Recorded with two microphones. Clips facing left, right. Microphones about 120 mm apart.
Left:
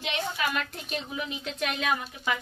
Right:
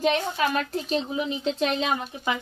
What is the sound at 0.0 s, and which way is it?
A woman's voice, 40° right (ahead or behind).